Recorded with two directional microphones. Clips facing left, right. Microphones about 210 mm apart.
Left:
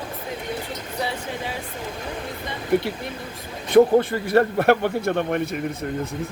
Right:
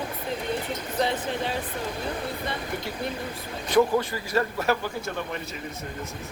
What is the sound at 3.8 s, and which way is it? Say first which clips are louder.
A man's voice: left 7 dB; 55° left (ahead or behind).